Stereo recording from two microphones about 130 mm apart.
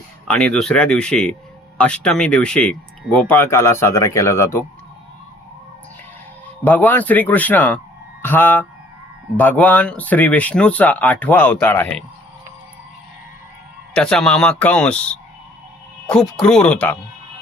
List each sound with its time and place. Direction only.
0.3 s speech: 5° left (ahead or behind)
6.7 s speech: 15° left (ahead or behind)
13.9 s speech: 5° left (ahead or behind)